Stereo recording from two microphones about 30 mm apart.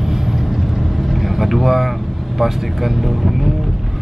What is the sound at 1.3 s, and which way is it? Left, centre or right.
Speech, centre.